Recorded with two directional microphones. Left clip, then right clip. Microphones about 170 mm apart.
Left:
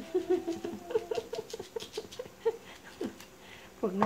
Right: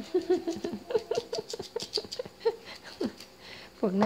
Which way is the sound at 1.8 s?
55° right (ahead or behind).